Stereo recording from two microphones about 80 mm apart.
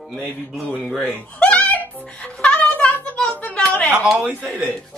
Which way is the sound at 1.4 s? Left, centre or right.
Centre.